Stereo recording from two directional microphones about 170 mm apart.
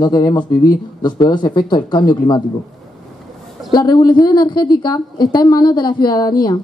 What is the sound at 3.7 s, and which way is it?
A woman's voice, 25° left (ahead or behind).